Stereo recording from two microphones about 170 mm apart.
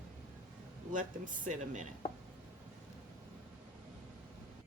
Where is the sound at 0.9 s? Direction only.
50° right (ahead or behind).